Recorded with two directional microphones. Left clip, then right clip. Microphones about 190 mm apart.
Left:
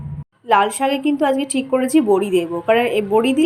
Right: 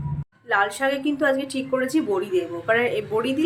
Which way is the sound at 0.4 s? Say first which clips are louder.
Left 6 dB; 25° left (ahead or behind).